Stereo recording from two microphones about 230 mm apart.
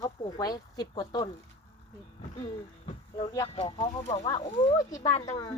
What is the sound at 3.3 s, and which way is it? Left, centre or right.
Speech, left.